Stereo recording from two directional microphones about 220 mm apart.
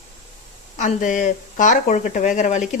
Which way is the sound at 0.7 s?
35° left (ahead or behind).